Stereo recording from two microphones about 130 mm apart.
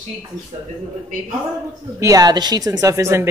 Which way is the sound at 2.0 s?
30° right (ahead or behind).